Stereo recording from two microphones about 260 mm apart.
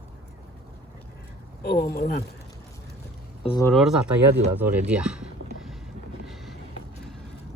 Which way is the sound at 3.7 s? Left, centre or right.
Centre.